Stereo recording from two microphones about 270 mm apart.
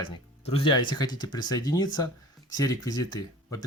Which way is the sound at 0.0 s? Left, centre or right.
Centre.